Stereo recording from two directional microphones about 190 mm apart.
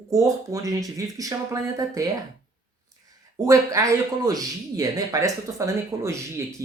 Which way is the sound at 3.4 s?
15° right (ahead or behind).